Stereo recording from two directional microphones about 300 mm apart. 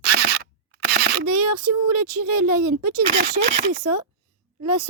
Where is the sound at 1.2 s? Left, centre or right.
Right.